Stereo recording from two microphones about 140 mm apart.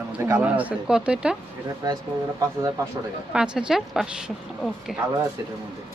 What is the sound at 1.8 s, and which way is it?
Speech, 25° right (ahead or behind).